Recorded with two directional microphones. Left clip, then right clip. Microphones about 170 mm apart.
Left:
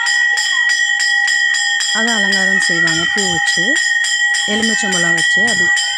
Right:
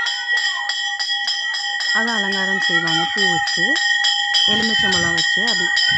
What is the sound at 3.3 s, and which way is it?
Speech, 20° left (ahead or behind).